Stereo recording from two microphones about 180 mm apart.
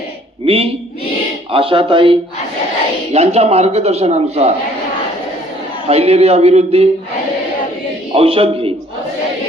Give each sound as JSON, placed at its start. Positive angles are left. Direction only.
{"t": 0.4, "sound": "speech", "side_deg": -30}
{"t": 5.9, "sound": "speech", "side_deg": -35}
{"t": 8.1, "sound": "speech", "side_deg": -30}